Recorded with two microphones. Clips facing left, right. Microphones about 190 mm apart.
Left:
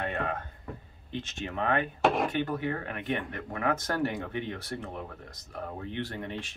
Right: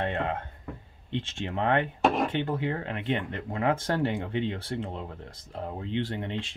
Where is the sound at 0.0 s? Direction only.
25° right (ahead or behind).